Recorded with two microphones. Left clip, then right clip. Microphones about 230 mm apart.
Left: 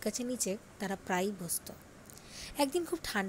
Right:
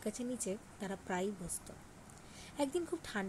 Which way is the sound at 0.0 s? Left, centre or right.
Left.